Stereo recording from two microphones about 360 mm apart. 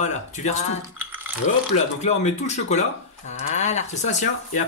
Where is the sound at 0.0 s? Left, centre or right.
Centre.